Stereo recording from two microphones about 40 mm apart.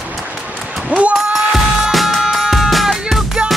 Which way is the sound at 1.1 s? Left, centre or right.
Centre.